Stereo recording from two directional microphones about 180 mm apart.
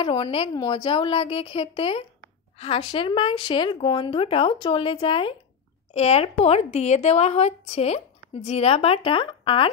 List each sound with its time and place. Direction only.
0.0 s a woman's voice: 30° left (ahead or behind)